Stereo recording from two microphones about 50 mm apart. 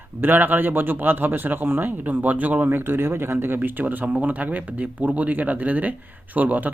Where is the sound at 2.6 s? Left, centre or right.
Right.